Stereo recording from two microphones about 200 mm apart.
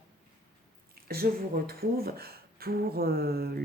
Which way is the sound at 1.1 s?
50° right (ahead or behind).